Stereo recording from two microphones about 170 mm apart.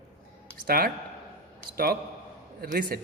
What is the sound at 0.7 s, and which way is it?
Speech, 65° right (ahead or behind).